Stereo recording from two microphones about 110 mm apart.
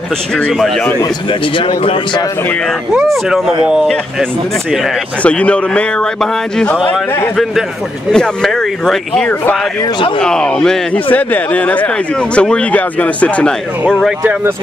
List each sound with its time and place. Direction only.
0.4 s speech: centre (ahead or behind)
1.8 s speech: 55° left (ahead or behind)
2.9 s speech: 5° right (ahead or behind)
5.2 s speech: 10° left (ahead or behind)
8.1 s speech: 5° left (ahead or behind)
11.1 s speech: 15° left (ahead or behind)